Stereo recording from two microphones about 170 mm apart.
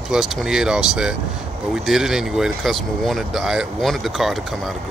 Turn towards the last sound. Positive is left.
turn(degrees=0)  # may be behind; listen again after turning